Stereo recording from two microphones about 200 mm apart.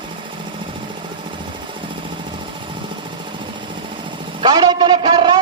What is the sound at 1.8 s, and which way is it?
Jackhammer, 25° right (ahead or behind).